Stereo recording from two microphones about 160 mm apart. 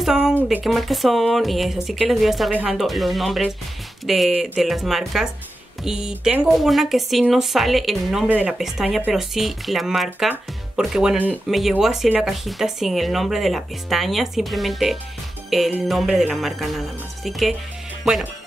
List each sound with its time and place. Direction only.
0.0 s speech: 5° right (ahead or behind)